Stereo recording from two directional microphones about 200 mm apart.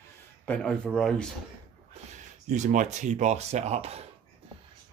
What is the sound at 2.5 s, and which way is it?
Speech, 40° right (ahead or behind).